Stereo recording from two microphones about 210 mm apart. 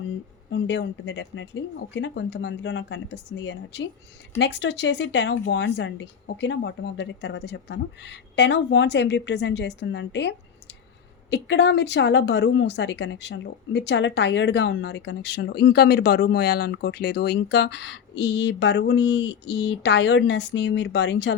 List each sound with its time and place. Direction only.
0.5 s speech: 55° left (ahead or behind)